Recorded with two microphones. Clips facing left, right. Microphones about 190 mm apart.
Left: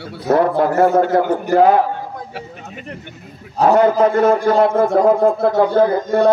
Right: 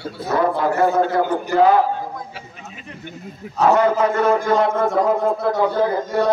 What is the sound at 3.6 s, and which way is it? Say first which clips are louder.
A man's voice: left 3 dB; 35° left (ahead or behind).